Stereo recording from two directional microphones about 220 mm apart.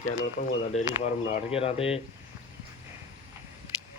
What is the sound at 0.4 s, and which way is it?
Speech, 45° left (ahead or behind).